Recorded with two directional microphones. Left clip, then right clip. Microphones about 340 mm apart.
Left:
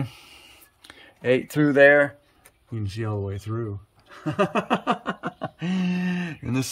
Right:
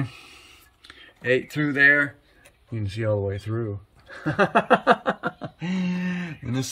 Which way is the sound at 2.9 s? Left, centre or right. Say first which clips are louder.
Right 7 dB; centre.